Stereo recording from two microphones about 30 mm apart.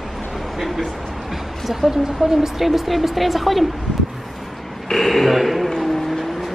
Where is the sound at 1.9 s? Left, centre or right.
Centre.